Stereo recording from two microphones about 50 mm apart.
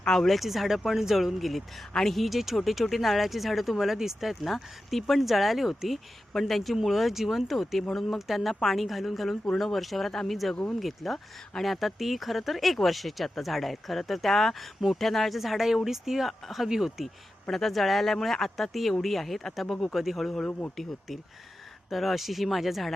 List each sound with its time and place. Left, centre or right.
0.0 s speech: centre
17.5 s speech: centre
21.8 s speech: centre